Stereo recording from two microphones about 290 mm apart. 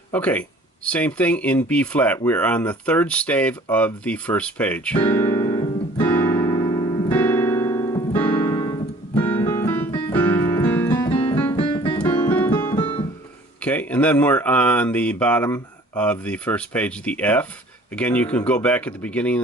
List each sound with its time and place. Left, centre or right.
0.1 s speech: centre
5.1 s music: centre
9.2 s keyboard: centre
11.1 s piano: centre
11.4 s keyboard: centre
13.6 s speech: centre